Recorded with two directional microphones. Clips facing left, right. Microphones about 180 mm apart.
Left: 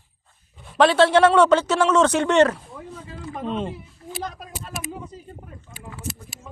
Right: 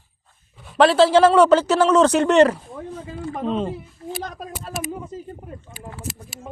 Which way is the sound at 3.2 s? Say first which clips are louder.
Right 3 dB; 35° right (ahead or behind).